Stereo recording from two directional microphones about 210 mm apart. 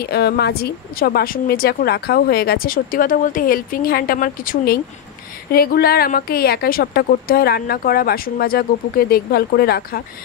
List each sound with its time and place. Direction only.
0.0 s a woman's voice: 50° left (ahead or behind)